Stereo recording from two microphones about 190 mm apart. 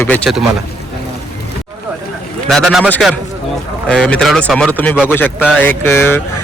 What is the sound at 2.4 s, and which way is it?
A man's voice, centre (ahead or behind).